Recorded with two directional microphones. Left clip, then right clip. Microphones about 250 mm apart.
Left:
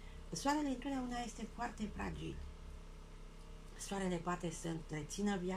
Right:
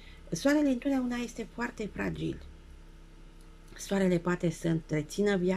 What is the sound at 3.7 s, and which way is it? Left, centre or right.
A woman's voice, right.